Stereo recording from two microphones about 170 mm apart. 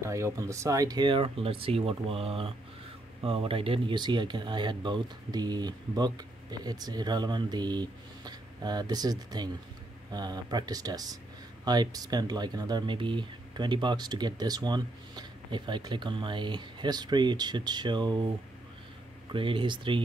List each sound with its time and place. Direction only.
0.0 s speech: 15° right (ahead or behind)
19.3 s speech: 30° right (ahead or behind)